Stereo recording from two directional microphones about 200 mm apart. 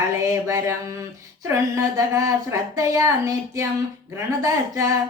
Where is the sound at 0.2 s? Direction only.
15° right (ahead or behind).